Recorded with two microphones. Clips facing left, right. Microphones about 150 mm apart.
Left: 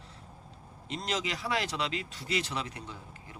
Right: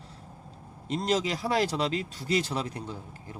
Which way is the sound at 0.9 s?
35° right (ahead or behind).